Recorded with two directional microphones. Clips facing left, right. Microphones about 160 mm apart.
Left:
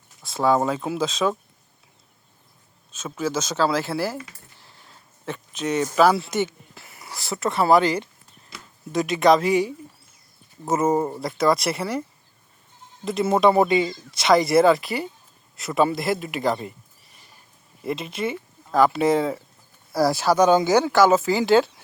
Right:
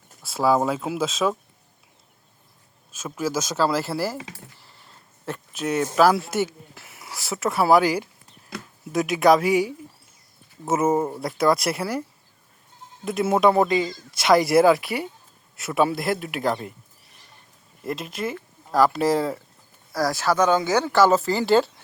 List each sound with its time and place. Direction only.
0.2 s speech: 5° right (ahead or behind)
2.9 s speech: 5° right (ahead or behind)
4.6 s a sound: centre (ahead or behind)
6.3 s speech: 5° right (ahead or behind)
13.1 s speech: 5° right (ahead or behind)
20.0 s speech: 15° left (ahead or behind)
20.9 s speech: centre (ahead or behind)